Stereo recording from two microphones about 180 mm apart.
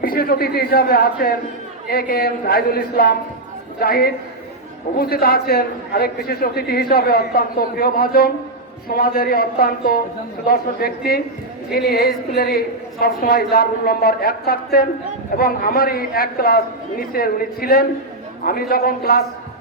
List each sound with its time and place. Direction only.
0.0 s a man's voice: 55° left (ahead or behind)